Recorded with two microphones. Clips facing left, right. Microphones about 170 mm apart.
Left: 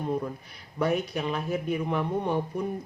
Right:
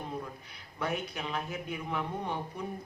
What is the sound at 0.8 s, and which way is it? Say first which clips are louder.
Speech: left 8 dB; 40° left (ahead or behind).